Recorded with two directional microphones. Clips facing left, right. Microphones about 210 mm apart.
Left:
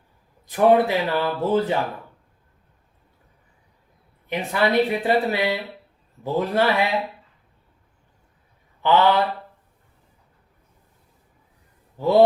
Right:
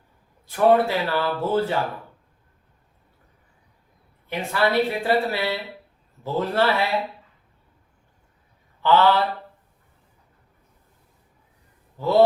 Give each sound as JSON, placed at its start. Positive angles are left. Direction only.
{"t": 0.4, "sound": "speech", "side_deg": 15}
{"t": 4.3, "sound": "speech", "side_deg": 20}
{"t": 8.8, "sound": "mantra", "side_deg": 15}